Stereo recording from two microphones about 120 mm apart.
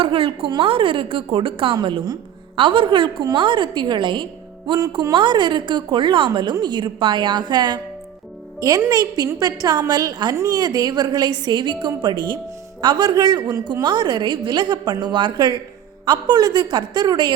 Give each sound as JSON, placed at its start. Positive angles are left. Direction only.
{"t": 0.0, "sound": "a woman's voice", "side_deg": -50}